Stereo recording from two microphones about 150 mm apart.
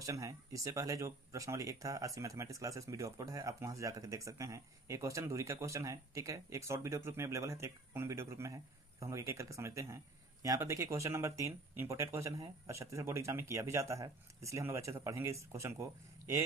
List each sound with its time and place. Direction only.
0.0 s speech: 20° right (ahead or behind)